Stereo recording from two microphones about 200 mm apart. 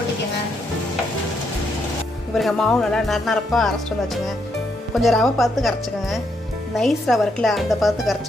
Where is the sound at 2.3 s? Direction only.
Centre (ahead or behind).